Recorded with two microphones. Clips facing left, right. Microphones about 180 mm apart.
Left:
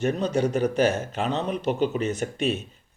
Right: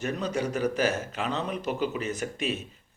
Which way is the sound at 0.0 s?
30° left (ahead or behind).